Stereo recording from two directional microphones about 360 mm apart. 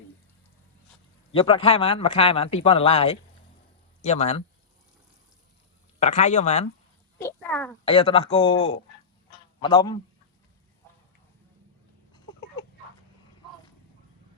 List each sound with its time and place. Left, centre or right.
1.3 s speech: centre
6.0 s speech: centre
7.2 s a man's voice: centre
12.1 s a sound: centre